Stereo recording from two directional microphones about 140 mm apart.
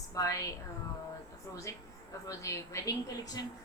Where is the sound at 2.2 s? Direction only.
20° left (ahead or behind).